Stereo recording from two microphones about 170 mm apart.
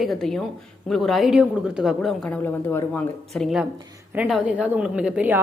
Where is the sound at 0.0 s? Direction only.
Centre (ahead or behind).